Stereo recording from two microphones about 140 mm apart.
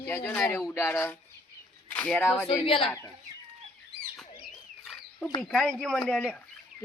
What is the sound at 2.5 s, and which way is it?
Speech, 40° left (ahead or behind).